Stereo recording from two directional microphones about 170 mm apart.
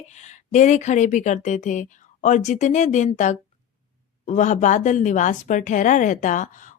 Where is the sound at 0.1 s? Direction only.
45° left (ahead or behind).